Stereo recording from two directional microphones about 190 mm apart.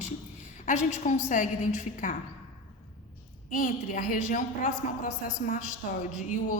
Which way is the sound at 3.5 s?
45° left (ahead or behind).